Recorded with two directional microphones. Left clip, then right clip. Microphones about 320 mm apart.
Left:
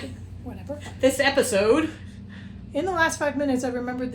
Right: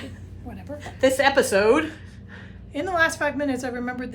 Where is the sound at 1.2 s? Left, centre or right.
Centre.